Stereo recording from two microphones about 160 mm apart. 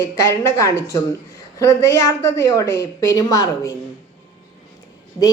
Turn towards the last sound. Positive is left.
turn(degrees=20)  # may be behind; listen again after turning